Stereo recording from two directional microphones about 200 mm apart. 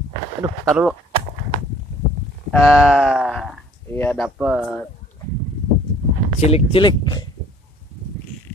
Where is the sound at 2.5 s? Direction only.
Centre (ahead or behind).